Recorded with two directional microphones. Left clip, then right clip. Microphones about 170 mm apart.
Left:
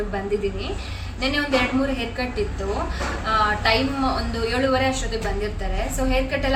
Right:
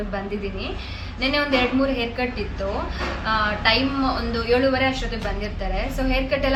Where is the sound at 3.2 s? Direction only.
5° right (ahead or behind).